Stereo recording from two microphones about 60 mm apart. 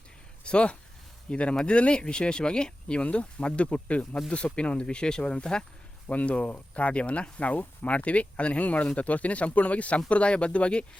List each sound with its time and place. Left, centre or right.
0.4 s speech: centre
6.1 s speech: left